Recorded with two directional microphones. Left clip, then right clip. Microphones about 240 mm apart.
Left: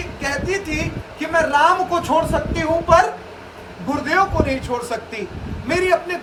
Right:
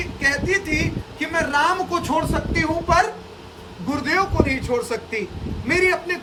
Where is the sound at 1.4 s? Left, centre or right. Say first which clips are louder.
Left 5 dB; centre.